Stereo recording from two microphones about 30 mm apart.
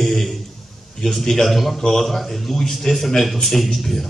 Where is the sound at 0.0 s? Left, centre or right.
Centre.